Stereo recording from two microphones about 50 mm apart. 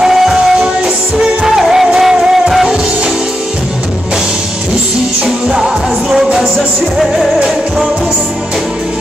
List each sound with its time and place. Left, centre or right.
0.0 s music: centre
0.6 s music: centre
1.5 s music: centre
5.2 s music: centre